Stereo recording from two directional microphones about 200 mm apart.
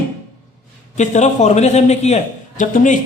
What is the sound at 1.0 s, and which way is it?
A man's voice, 35° left (ahead or behind).